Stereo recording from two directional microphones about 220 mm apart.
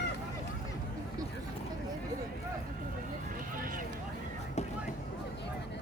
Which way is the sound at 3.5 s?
40° right (ahead or behind).